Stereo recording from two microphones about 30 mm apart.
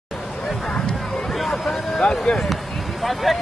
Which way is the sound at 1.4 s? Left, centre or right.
Centre.